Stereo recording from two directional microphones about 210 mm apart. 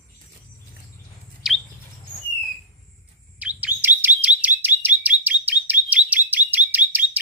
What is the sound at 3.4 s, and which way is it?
Chirp, 5° right (ahead or behind).